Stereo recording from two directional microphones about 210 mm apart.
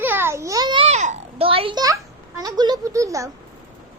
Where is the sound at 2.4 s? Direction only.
20° right (ahead or behind).